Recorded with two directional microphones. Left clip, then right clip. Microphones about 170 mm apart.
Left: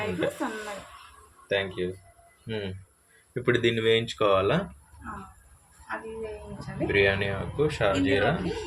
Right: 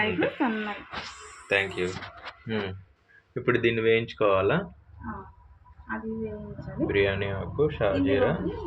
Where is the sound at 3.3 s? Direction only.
15° left (ahead or behind).